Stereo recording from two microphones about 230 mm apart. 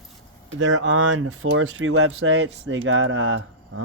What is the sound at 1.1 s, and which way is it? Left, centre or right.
Speech, right.